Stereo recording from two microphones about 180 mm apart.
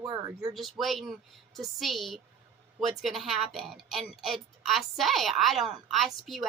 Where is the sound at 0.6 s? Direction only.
Centre (ahead or behind).